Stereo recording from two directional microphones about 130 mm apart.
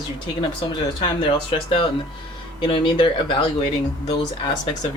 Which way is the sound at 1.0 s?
40° left (ahead or behind).